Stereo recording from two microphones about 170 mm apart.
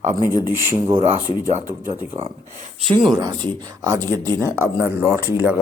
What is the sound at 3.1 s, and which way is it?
Speech, 25° right (ahead or behind).